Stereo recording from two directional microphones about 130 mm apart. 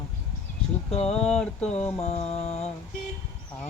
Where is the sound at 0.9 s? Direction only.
55° left (ahead or behind).